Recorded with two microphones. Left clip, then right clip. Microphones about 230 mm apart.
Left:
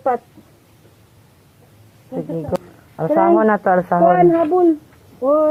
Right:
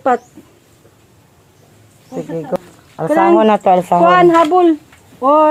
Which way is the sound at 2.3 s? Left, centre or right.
Centre.